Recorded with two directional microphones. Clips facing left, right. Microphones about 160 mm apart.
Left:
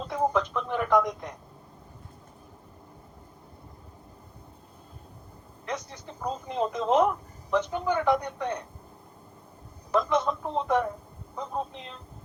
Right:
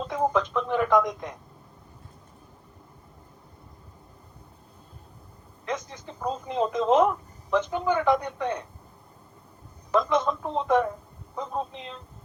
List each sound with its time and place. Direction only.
0.1 s radio: 90° right
5.6 s a woman's voice: 90° right
9.9 s a sound: 90° right
11.3 s vehicle: 90° right